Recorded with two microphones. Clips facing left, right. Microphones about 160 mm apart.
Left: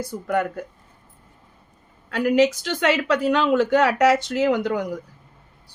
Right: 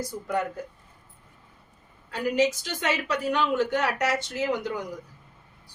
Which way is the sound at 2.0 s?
75° left (ahead or behind).